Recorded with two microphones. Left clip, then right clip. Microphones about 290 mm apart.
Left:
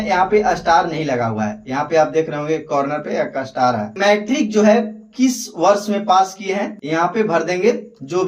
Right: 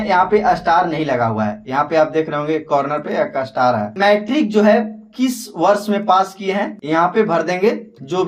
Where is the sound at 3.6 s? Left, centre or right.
Centre.